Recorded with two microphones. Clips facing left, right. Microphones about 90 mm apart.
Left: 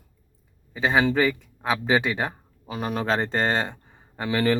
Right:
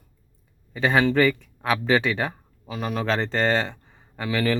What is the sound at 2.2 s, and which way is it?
Speech, 30° left (ahead or behind).